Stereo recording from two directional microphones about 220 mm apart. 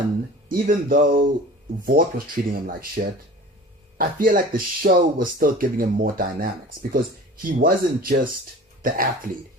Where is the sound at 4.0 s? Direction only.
40° right (ahead or behind).